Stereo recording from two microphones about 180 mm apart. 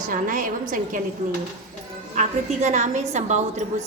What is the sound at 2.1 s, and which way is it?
A woman's voice, 40° right (ahead or behind).